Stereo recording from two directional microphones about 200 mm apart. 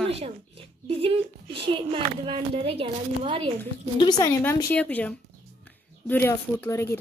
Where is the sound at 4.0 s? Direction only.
20° left (ahead or behind).